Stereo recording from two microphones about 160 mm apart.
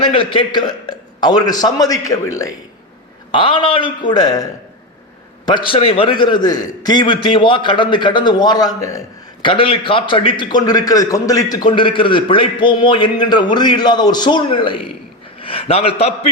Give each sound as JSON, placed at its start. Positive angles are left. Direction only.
{"t": 0.0, "sound": "a man's voice", "side_deg": 35}
{"t": 3.3, "sound": "a man's voice", "side_deg": 30}
{"t": 5.5, "sound": "a man's voice", "side_deg": 30}